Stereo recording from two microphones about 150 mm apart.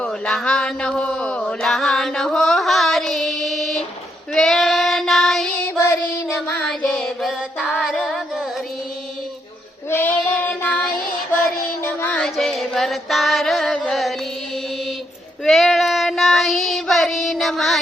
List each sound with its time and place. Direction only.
0.0 s a sound: 5° left (ahead or behind)
4.4 s child singing: centre (ahead or behind)
5.6 s child singing: 15° left (ahead or behind)
6.7 s music: centre (ahead or behind)
9.9 s child singing: 15° left (ahead or behind)
11.8 s music: 15° left (ahead or behind)
15.4 s child singing: centre (ahead or behind)